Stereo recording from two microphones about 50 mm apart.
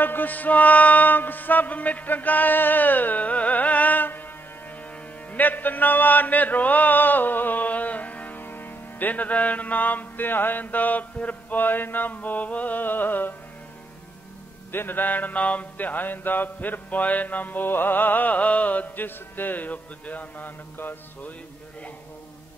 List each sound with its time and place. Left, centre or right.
0.0 s music: left
5.3 s mantra: left
9.1 s music: left
14.7 s music: left